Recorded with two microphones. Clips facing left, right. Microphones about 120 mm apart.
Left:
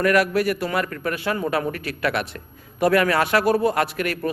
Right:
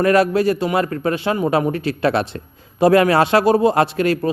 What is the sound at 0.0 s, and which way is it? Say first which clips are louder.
A man's voice: right 4 dB; 25° right (ahead or behind).